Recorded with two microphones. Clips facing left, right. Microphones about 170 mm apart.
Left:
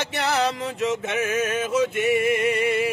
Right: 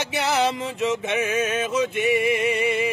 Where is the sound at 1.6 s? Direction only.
5° left (ahead or behind).